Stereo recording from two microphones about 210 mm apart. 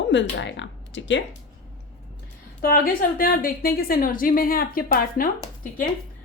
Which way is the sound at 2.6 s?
45° left (ahead or behind).